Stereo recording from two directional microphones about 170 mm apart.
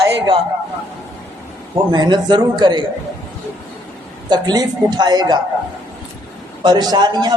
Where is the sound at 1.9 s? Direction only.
25° right (ahead or behind).